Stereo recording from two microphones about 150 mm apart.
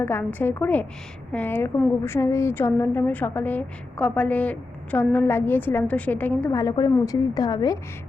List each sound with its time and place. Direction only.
0.0 s a woman's voice: 15° left (ahead or behind)
6.6 s a woman's voice: 25° left (ahead or behind)